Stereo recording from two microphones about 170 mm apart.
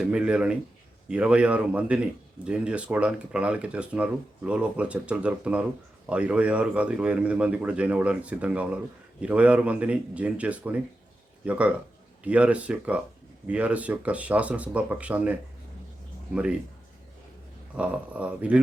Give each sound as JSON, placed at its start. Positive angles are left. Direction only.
{"t": 0.0, "sound": "speech", "side_deg": -5}
{"t": 17.7, "sound": "speech", "side_deg": -10}